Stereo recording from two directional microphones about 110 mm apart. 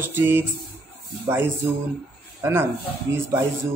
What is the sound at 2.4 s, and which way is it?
Speech, 20° right (ahead or behind).